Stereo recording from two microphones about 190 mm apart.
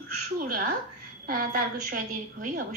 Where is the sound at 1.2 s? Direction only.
50° right (ahead or behind).